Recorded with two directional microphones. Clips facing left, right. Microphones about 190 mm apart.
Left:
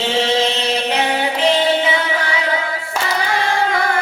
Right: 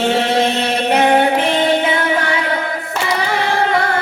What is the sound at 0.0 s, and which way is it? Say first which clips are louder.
Chant: right 2 dB; 55° right (ahead or behind).